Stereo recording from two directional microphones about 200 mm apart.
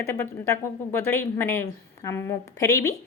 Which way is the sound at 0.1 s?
10° left (ahead or behind).